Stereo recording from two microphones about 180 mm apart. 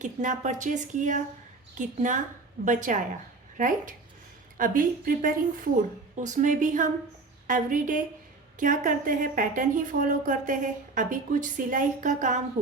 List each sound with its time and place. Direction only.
0.0 s a woman's voice: 45° right (ahead or behind)